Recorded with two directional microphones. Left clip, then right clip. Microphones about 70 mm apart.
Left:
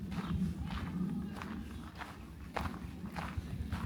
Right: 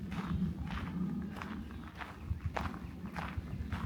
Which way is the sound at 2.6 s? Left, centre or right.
Left.